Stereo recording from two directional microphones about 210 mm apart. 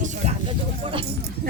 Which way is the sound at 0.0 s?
35° right (ahead or behind).